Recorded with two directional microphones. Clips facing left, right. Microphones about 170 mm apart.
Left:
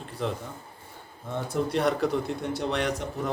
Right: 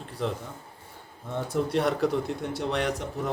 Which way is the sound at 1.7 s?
Centre (ahead or behind).